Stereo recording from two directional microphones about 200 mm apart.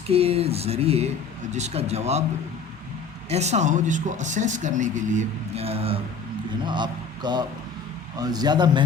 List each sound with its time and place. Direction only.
0.1 s speech: 30° right (ahead or behind)
3.2 s a man's voice: 35° right (ahead or behind)